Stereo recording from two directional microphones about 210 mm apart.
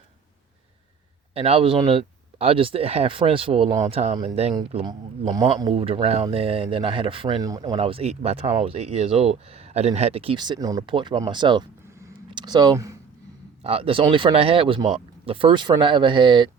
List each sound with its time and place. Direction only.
1.3 s speech: 30° right (ahead or behind)
13.6 s speech: 25° right (ahead or behind)